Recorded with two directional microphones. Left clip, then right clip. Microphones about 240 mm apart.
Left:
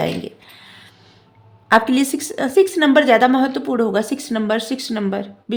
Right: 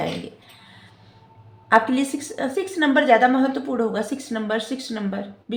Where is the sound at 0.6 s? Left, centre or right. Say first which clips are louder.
Left 6 dB; left.